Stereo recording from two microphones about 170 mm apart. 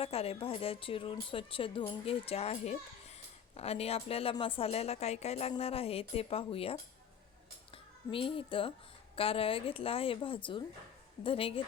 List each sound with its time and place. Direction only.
0.0 s a woman's voice: 35° left (ahead or behind)
8.1 s a woman's voice: 30° left (ahead or behind)